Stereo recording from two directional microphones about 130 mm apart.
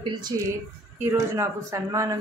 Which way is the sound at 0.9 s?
20° right (ahead or behind).